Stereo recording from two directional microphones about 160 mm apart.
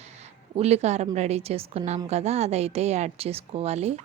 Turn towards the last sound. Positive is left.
turn(degrees=-40)  # may be behind; listen again after turning